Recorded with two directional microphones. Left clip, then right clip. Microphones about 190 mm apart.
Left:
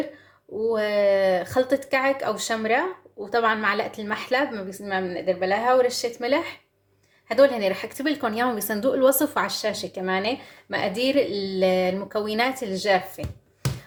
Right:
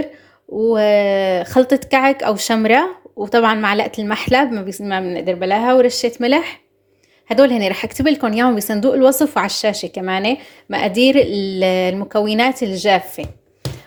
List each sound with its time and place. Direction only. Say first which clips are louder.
0.7 s a woman's voice: right 7 dB; 40° right (ahead or behind)